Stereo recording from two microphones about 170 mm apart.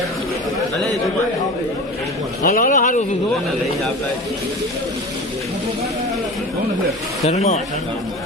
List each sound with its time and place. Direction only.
2.5 s speech: 55° left (ahead or behind)
7.3 s speech: 40° left (ahead or behind)